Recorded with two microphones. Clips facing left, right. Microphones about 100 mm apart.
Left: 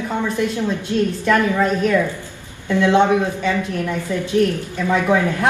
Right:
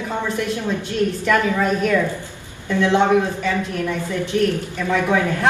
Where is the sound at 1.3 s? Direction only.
20° left (ahead or behind).